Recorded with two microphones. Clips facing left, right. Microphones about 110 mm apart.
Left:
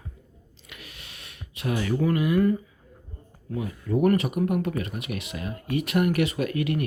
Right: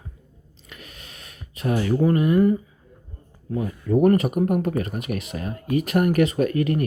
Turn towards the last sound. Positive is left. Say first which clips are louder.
# right 5 dB
turn(degrees=-40)  # may be behind; listen again after turning